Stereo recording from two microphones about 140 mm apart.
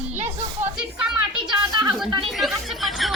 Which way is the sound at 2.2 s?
Centre (ahead or behind).